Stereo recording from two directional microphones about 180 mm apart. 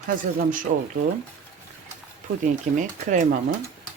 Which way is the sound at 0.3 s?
50° right (ahead or behind).